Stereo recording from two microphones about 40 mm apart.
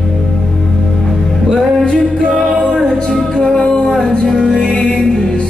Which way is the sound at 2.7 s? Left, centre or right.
Centre.